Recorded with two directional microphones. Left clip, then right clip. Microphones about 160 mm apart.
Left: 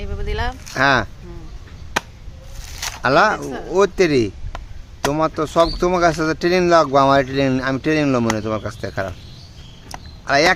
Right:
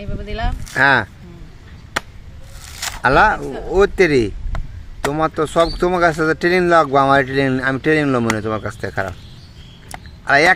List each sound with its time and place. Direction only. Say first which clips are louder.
0.0 s speech: left 1 dB; 40° left (ahead or behind)
0.7 s speech: right 3 dB; centre (ahead or behind)
3.0 s speech: right 2 dB; centre (ahead or behind)
10.2 s speech: right 3 dB; 5° right (ahead or behind)